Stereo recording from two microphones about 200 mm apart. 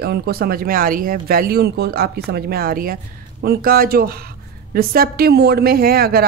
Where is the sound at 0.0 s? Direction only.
50° right (ahead or behind).